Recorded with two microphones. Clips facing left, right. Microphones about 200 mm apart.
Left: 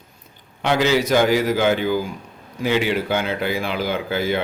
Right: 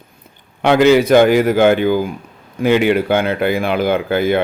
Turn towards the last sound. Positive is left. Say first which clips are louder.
# right 7 dB
turn(degrees=-55)  # may be behind; listen again after turning